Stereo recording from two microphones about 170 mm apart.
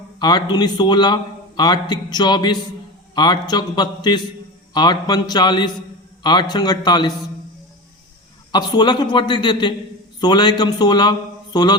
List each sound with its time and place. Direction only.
0.2 s a man's voice: 25° left (ahead or behind)
8.5 s a man's voice: 25° left (ahead or behind)